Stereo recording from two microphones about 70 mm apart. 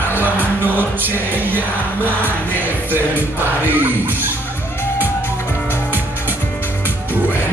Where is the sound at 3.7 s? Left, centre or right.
Right.